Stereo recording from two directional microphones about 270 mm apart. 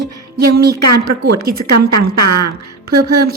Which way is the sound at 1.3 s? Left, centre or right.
Right.